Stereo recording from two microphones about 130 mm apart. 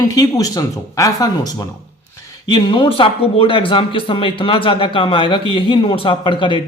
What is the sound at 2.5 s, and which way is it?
Speech, 40° left (ahead or behind).